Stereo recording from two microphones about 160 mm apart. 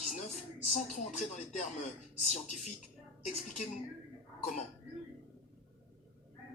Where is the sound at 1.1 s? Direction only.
45° left (ahead or behind).